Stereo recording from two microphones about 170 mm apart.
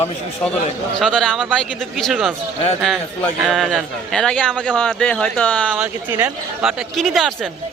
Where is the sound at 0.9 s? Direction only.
5° left (ahead or behind).